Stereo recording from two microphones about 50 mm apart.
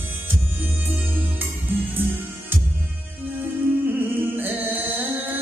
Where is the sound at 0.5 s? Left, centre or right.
Right.